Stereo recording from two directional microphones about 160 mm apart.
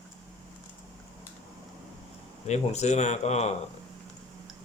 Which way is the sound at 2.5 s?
45° left (ahead or behind).